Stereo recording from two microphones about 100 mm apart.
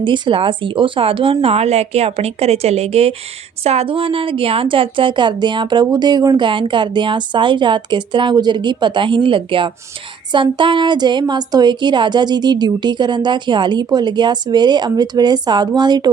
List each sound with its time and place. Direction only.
0.0 s a woman's voice: 55° right (ahead or behind)